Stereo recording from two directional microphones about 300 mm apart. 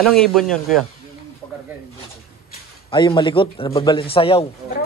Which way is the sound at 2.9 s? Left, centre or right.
Centre.